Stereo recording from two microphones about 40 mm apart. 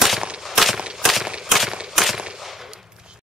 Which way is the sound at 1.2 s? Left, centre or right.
Centre.